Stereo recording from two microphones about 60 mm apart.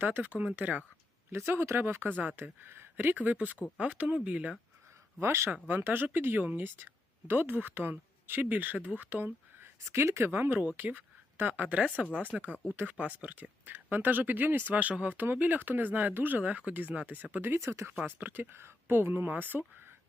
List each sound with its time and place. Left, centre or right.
0.0 s speech: right
1.3 s speech: right
5.2 s speech: right
5.6 s speech: right
9.8 s speech: right
10.6 s speech: right
17.4 s speech: right
18.0 s speech: right